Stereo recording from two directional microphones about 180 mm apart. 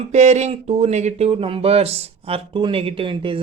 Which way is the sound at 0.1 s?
40° right (ahead or behind).